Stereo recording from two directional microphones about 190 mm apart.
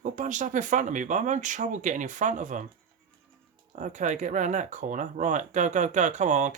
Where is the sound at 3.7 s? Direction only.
40° right (ahead or behind).